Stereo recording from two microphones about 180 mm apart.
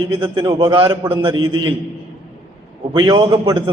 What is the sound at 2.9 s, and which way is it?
Speech, 25° right (ahead or behind).